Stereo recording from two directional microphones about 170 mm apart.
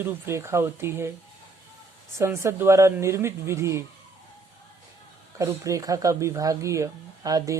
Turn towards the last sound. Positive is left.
turn(degrees=-20)  # may be behind; listen again after turning